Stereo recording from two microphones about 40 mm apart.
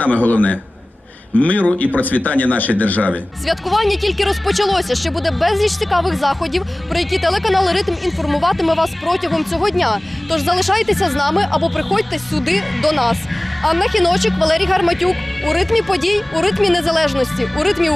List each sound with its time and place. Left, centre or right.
0.0 s speech: left
1.4 s speech: left
3.4 s speech: centre